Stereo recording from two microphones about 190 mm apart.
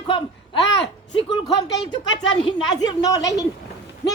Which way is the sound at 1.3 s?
20° left (ahead or behind).